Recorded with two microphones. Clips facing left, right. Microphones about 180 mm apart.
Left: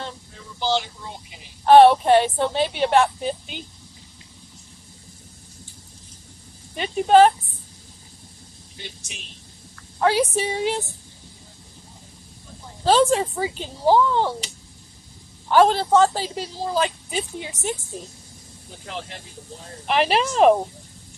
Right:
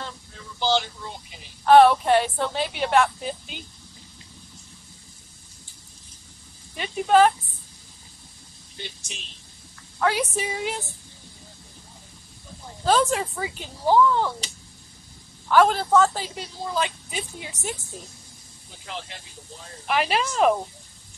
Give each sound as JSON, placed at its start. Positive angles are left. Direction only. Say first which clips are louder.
{"t": 0.6, "sound": "speech", "louder": "even", "side_deg": 15}
{"t": 1.7, "sound": "a woman's voice", "louder": "left 3 dB", "side_deg": 30}
{"t": 6.8, "sound": "a woman's voice", "louder": "left 4 dB", "side_deg": 30}
{"t": 9.9, "sound": "a woman's voice", "louder": "left 4 dB", "side_deg": 30}
{"t": 12.8, "sound": "a woman's voice", "louder": "left 4 dB", "side_deg": 30}
{"t": 15.4, "sound": "a woman's voice", "louder": "left 2 dB", "side_deg": 30}
{"t": 19.9, "sound": "a woman's voice", "louder": "left 4 dB", "side_deg": 30}